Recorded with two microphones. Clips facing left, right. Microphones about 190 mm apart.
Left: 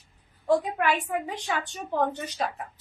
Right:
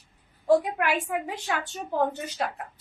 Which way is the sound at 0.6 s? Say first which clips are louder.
Left 1 dB; 10° right (ahead or behind).